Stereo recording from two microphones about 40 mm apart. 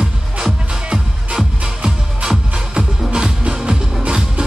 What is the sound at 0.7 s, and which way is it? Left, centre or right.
Music, right.